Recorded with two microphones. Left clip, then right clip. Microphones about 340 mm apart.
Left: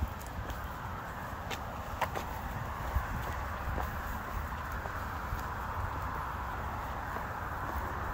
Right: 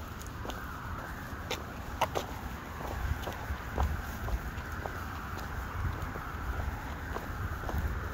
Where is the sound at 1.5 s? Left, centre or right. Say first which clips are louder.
Even; right.